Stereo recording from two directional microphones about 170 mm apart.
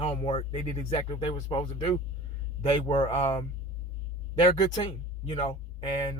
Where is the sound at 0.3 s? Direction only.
35° left (ahead or behind).